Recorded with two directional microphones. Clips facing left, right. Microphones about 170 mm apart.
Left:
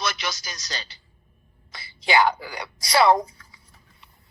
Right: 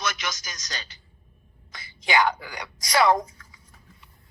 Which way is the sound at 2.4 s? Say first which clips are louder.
Left 3 dB; 30° left (ahead or behind).